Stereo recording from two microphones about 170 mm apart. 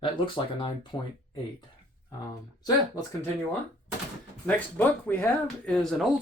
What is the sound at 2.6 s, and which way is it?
Speech, 20° left (ahead or behind).